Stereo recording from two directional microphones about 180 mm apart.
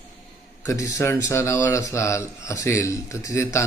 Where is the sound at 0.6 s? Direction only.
15° left (ahead or behind).